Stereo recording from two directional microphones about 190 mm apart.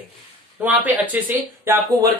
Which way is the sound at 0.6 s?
5° right (ahead or behind).